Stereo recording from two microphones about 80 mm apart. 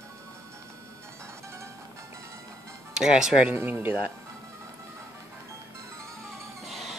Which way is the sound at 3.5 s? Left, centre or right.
Right.